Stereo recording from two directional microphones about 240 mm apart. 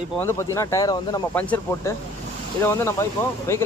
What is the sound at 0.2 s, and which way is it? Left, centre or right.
Speech, centre.